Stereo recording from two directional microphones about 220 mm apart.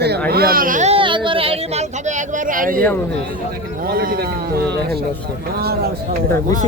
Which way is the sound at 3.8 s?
40° right (ahead or behind).